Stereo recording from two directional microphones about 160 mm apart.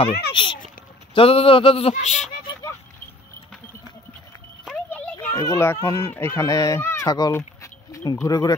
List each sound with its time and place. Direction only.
0.3 s a child's voice: 30° left (ahead or behind)
4.9 s a child's voice: 15° left (ahead or behind)